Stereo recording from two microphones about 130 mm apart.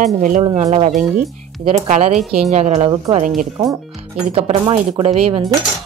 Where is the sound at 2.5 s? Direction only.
55° right (ahead or behind).